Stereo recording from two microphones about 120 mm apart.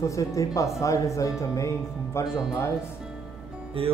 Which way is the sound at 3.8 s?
55° right (ahead or behind).